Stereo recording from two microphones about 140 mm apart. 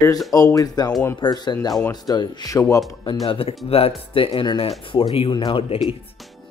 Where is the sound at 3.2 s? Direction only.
45° left (ahead or behind).